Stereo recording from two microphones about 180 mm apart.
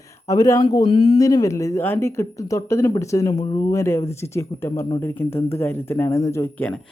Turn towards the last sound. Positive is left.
turn(degrees=10)  # may be behind; listen again after turning